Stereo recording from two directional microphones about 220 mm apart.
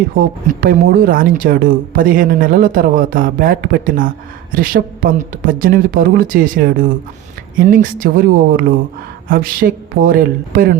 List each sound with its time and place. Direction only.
0.2 s speech: 40° right (ahead or behind)